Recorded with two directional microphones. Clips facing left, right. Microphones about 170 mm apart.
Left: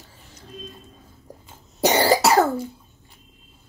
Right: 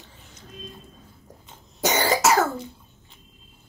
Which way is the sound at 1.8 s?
35° left (ahead or behind).